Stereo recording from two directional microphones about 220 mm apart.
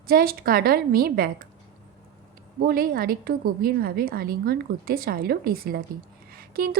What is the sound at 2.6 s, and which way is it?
A woman's voice, 45° right (ahead or behind).